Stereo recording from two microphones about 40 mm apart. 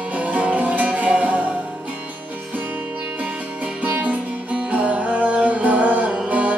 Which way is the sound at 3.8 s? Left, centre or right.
Right.